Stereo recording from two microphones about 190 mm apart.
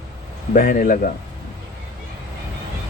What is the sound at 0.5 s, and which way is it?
Speech, 45° left (ahead or behind).